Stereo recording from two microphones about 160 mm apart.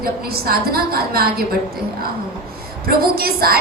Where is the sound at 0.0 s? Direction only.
70° right (ahead or behind).